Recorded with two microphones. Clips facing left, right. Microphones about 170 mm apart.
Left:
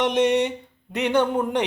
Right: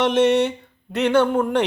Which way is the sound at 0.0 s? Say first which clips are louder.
Right 3 dB; 15° left (ahead or behind).